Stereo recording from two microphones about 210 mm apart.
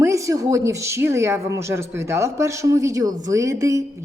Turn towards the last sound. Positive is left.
turn(degrees=-15)  # may be behind; listen again after turning